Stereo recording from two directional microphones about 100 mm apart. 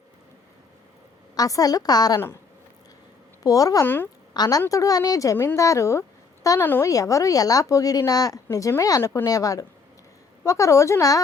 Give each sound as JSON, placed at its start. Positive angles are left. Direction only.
{"t": 1.4, "sound": "a woman's voice", "side_deg": 35}
{"t": 3.4, "sound": "a woman's voice", "side_deg": 35}
{"t": 3.8, "sound": "a woman's voice", "side_deg": 20}
{"t": 4.4, "sound": "a woman's voice", "side_deg": 40}